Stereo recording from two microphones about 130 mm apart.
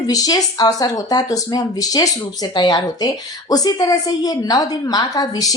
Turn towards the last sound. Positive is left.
turn(degrees=30)  # may be behind; listen again after turning